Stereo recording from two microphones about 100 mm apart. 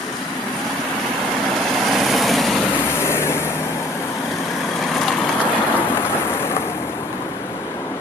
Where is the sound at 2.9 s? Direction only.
25° left (ahead or behind).